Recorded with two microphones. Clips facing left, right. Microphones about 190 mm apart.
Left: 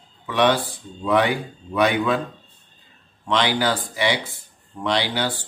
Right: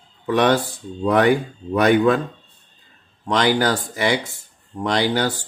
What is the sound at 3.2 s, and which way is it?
Speech, 45° right (ahead or behind).